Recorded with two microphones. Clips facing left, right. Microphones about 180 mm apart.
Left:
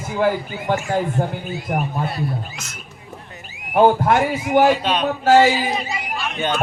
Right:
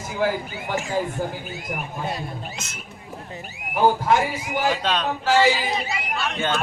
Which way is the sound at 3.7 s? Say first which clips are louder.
Left 4 dB; 55° left (ahead or behind).